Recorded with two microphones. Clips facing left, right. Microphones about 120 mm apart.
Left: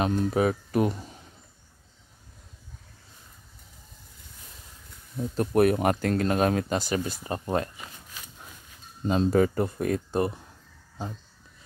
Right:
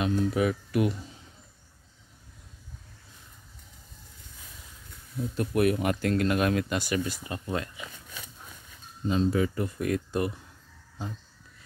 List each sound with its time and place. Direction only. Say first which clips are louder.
0.0 s speech: left 2 dB; 35° left (ahead or behind)
5.1 s speech: left 4 dB; 35° left (ahead or behind)
9.0 s speech: left 3 dB; 50° left (ahead or behind); by 10.4 s 30° left (ahead or behind)